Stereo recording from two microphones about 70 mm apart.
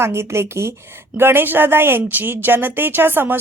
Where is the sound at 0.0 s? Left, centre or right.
Right.